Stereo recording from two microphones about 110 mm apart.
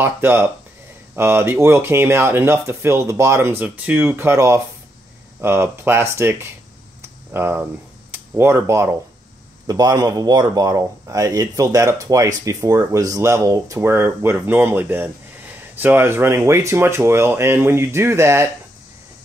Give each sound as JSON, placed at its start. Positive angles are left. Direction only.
{"t": 0.0, "sound": "speech", "side_deg": -20}